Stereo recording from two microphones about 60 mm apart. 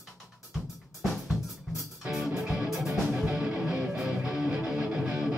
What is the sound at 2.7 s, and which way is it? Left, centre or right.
Music, centre.